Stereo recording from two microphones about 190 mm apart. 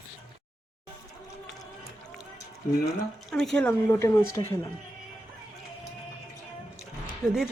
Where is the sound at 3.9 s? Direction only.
15° left (ahead or behind).